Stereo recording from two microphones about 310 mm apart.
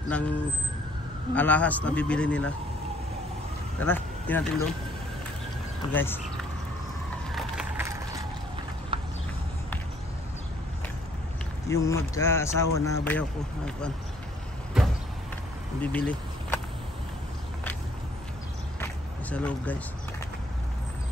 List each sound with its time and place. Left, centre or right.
0.1 s a man's voice: centre
1.3 s a man's voice: centre
3.8 s speech: centre
5.9 s speech: centre
7.3 s wood: centre
8.9 s a sound: centre
11.7 s a man's voice: centre
15.8 s speech: centre
18.8 s a sound: centre